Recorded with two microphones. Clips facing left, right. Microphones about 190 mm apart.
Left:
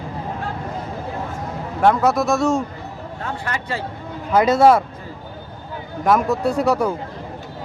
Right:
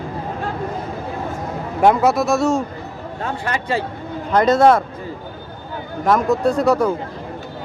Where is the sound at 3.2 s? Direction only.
20° right (ahead or behind).